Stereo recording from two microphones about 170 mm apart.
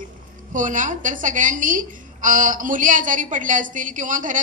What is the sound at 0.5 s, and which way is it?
A woman's voice, 50° right (ahead or behind).